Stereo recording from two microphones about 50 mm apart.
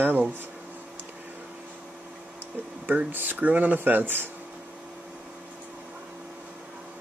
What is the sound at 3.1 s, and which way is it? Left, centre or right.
Speech, right.